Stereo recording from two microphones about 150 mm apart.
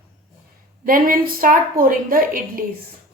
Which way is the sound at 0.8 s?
70° right (ahead or behind).